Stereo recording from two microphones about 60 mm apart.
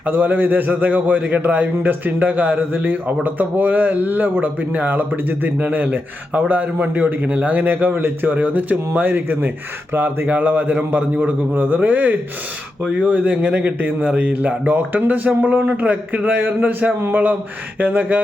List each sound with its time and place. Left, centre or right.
0.0 s a man's voice: right
10.2 s a man's voice: right